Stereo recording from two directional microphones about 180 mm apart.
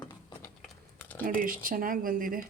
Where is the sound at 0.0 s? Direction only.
25° left (ahead or behind).